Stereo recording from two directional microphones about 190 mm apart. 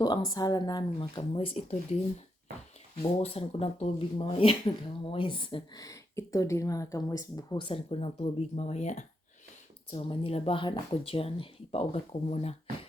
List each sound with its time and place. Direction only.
0.3 s speech: 20° left (ahead or behind)
3.2 s speech: 30° left (ahead or behind)